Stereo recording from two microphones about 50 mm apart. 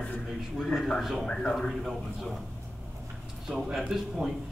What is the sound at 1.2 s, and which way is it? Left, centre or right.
Speech, centre.